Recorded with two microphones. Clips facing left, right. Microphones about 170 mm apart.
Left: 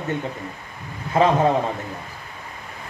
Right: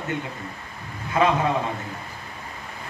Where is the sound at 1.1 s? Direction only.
30° left (ahead or behind).